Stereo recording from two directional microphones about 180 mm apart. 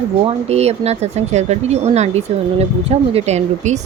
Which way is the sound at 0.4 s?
35° right (ahead or behind).